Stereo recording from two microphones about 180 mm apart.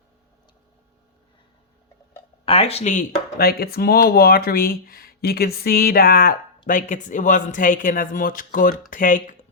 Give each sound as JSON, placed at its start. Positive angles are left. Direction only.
{"t": 2.4, "sound": "speech", "side_deg": 35}